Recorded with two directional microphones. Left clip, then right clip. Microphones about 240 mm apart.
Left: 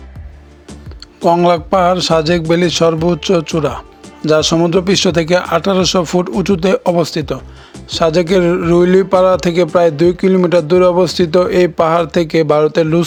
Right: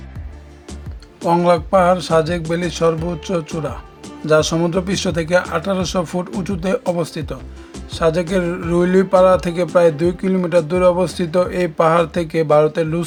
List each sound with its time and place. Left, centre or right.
1.2 s speech: left